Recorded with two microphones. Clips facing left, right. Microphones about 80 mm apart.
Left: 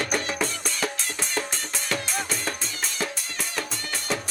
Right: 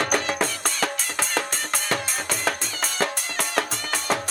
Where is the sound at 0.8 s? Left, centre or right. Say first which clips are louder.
Right 3 dB; right.